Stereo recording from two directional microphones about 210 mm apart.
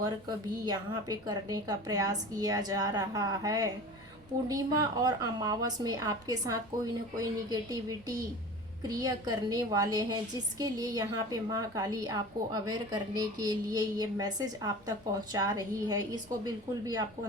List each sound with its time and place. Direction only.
0.6 s a woman's voice: 20° right (ahead or behind)